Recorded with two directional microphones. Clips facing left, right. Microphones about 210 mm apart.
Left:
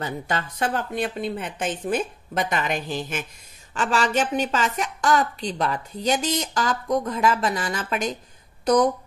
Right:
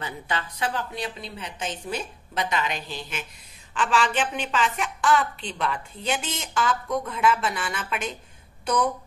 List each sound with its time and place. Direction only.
0.0 s a woman's voice: 45° left (ahead or behind)